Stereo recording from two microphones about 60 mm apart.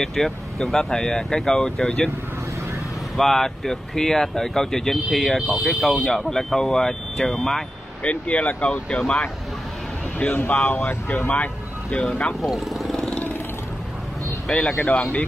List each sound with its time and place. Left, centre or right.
0.0 s speech: centre
3.2 s speech: centre
8.0 s speech: left
10.1 s speech: left
12.4 s vehicle: centre
14.5 s speech: centre
14.8 s speech: left